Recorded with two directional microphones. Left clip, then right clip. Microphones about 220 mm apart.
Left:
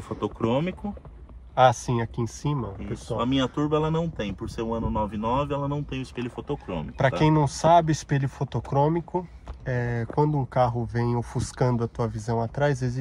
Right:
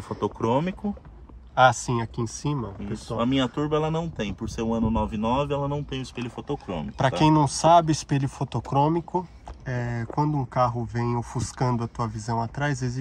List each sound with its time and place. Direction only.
0.2 s speech: 30° right (ahead or behind)
1.5 s speech: 5° right (ahead or behind)
3.1 s speech: 20° right (ahead or behind)
7.0 s speech: 10° right (ahead or behind)